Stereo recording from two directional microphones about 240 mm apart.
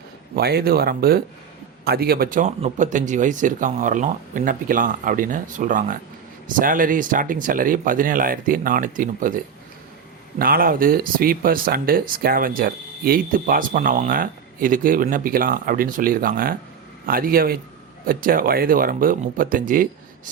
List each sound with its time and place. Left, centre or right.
0.3 s speech: right
10.3 s speech: right